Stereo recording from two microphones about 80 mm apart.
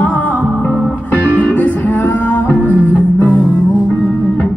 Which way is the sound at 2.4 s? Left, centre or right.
Left.